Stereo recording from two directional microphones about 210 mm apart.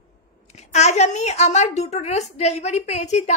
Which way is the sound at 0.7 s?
35° left (ahead or behind).